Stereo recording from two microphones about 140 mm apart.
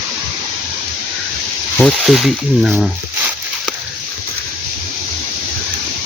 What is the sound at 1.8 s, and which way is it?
Speech, centre (ahead or behind).